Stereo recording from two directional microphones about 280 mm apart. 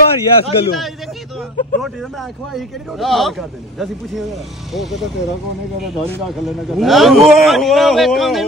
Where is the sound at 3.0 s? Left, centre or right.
Centre.